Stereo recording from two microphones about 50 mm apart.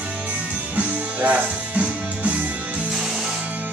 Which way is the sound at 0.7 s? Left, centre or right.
Right.